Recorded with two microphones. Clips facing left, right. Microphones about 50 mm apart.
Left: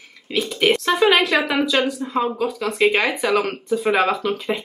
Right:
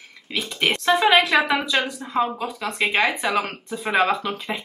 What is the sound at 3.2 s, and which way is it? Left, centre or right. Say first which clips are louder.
Speech: left 4 dB; centre.